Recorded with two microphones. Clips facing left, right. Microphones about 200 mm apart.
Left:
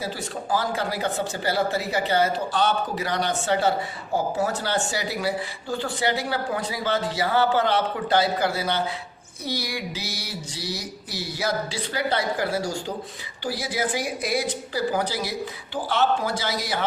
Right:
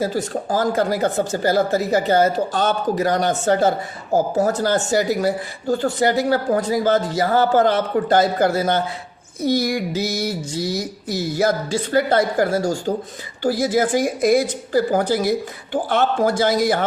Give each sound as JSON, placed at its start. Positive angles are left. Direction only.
{"t": 0.0, "sound": "speech", "side_deg": -45}